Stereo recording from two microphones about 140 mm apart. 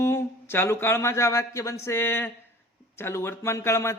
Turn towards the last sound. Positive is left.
turn(degrees=20)  # may be behind; listen again after turning